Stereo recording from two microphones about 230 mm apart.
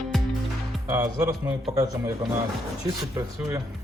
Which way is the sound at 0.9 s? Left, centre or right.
Centre.